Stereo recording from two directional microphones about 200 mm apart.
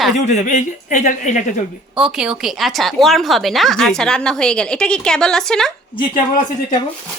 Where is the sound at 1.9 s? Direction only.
5° right (ahead or behind).